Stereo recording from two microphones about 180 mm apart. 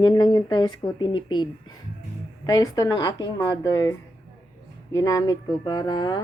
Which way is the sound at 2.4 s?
20° left (ahead or behind).